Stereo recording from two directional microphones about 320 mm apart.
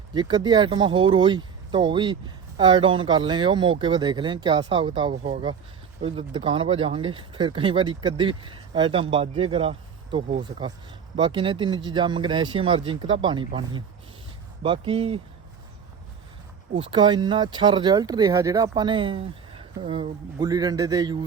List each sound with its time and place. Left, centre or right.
0.1 s speech: centre
16.7 s speech: centre